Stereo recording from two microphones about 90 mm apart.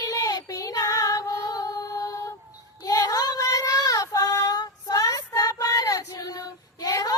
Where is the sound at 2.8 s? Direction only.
45° left (ahead or behind).